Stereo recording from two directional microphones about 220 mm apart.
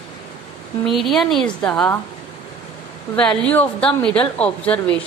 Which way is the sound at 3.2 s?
5° left (ahead or behind).